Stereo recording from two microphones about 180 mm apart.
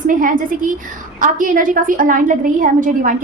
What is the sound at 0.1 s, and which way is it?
A woman's voice, 50° right (ahead or behind).